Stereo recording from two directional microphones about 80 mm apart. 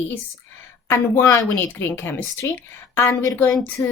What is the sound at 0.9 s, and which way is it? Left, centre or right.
Speech, left.